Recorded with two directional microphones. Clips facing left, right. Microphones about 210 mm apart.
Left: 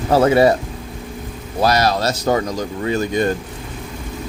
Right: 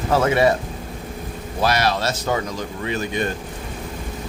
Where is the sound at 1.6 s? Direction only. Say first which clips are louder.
Left 4 dB; 40° left (ahead or behind).